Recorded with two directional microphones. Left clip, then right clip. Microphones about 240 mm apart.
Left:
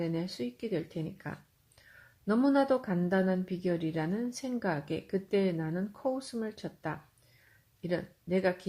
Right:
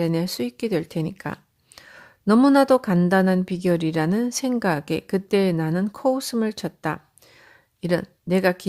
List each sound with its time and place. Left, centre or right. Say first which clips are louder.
0.0 s speech: right 11 dB; right